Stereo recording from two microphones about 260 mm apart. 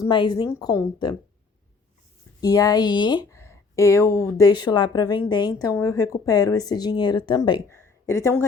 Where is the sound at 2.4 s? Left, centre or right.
Centre.